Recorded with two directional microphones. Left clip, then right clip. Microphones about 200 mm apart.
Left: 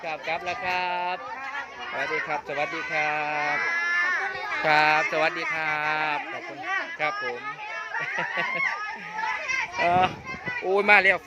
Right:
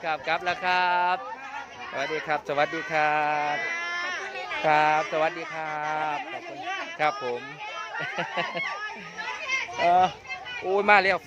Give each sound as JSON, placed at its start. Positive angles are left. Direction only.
{"t": 0.0, "sound": "speech", "side_deg": -20}
{"t": 3.8, "sound": "baby cry", "side_deg": -40}
{"t": 4.6, "sound": "speech", "side_deg": -5}
{"t": 7.1, "sound": "speech", "side_deg": -55}
{"t": 8.1, "sound": "speech", "side_deg": -15}
{"t": 9.8, "sound": "speech", "side_deg": -5}